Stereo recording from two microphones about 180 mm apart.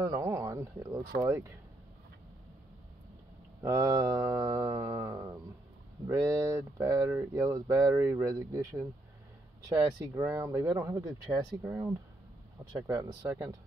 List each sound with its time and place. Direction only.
0.0 s speech: 15° right (ahead or behind)
3.6 s speech: 20° right (ahead or behind)